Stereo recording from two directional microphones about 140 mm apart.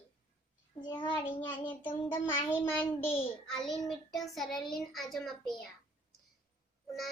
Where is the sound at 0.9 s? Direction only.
35° left (ahead or behind).